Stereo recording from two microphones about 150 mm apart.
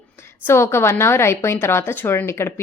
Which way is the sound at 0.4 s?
15° left (ahead or behind).